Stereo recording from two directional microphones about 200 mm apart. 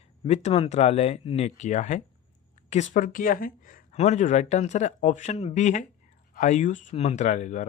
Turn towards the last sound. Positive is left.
turn(degrees=35)  # may be behind; listen again after turning